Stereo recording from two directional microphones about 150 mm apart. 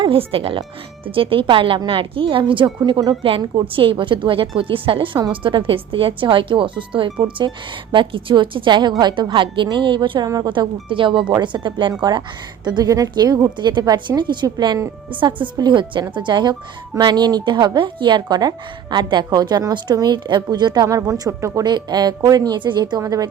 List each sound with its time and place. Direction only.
0.0 s a woman's voice: 35° right (ahead or behind)